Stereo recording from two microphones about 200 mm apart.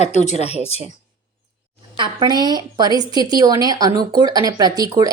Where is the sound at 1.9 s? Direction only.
20° right (ahead or behind).